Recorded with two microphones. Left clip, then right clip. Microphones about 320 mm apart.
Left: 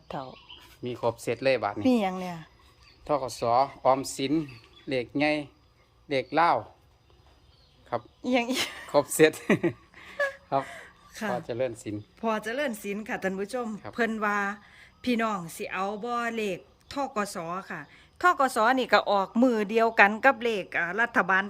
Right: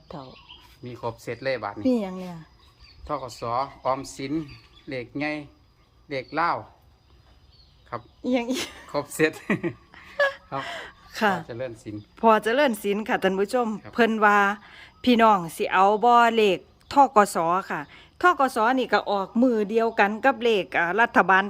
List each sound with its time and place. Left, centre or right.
0.9 s speech: left
1.8 s a woman's voice: centre
3.0 s speech: left
8.2 s speech: centre
8.9 s speech: left
10.2 s a sound: centre
10.7 s speech: centre
11.4 s speech: left
12.1 s speech: centre